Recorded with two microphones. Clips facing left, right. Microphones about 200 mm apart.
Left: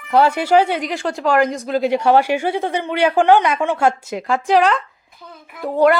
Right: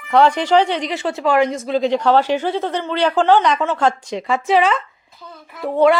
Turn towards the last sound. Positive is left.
turn(degrees=0)  # may be behind; listen again after turning